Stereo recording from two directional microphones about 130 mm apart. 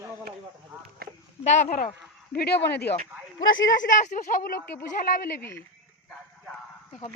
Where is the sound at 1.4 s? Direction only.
60° left (ahead or behind).